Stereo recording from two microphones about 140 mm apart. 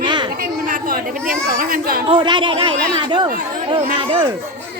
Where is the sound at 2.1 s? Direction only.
35° right (ahead or behind).